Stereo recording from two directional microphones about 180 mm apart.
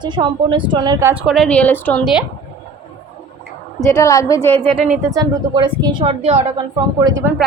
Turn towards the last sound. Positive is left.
turn(degrees=-20)  # may be behind; listen again after turning